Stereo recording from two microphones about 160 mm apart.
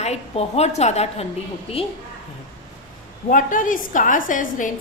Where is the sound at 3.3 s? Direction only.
55° left (ahead or behind).